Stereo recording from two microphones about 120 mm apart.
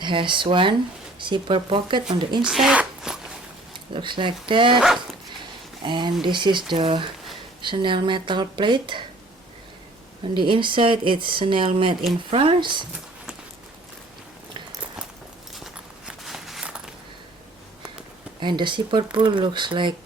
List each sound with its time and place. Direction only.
0.0 s speech: 45° right (ahead or behind)
2.4 s speech: 5° right (ahead or behind)
3.9 s speech: 45° right (ahead or behind)
5.8 s speech: 40° right (ahead or behind)
10.3 s speech: 45° right (ahead or behind)
15.5 s walk: centre (ahead or behind)
18.3 s speech: 40° right (ahead or behind)